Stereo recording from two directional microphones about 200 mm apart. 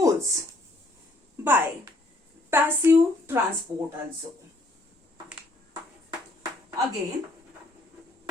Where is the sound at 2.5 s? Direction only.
10° right (ahead or behind).